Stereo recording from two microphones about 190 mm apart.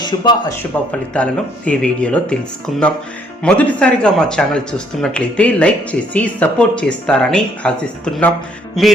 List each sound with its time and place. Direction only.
0.0 s speech: 20° left (ahead or behind)
1.1 s speech: 5° left (ahead or behind)